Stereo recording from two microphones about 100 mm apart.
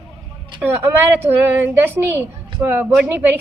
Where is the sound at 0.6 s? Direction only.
20° right (ahead or behind).